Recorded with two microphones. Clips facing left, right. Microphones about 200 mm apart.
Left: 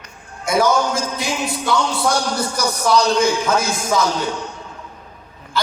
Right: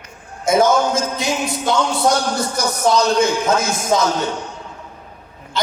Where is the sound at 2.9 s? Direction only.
20° right (ahead or behind).